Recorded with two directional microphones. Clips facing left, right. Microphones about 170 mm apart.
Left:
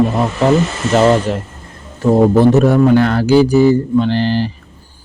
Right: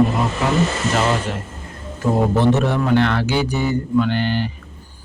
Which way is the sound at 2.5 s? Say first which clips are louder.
Left 7 dB; 40° left (ahead or behind).